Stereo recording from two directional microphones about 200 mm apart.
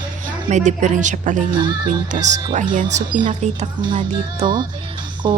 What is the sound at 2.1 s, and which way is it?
Speech, 35° right (ahead or behind).